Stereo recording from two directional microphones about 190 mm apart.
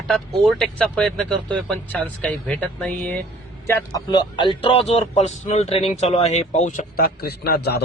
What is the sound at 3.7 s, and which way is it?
Speech, 20° left (ahead or behind).